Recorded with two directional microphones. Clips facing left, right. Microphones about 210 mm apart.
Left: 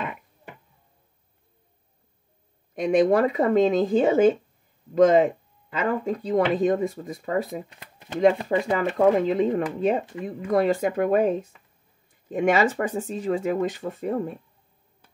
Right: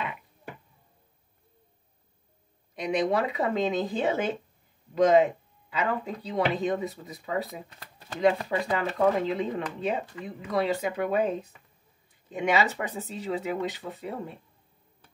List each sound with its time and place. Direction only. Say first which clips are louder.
2.7 s speech: left 7 dB; 50° left (ahead or behind)
8.7 s speech: left 5 dB; 50° left (ahead or behind)